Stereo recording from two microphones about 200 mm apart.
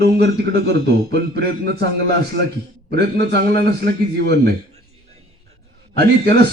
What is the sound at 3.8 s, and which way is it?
Speech, 55° right (ahead or behind).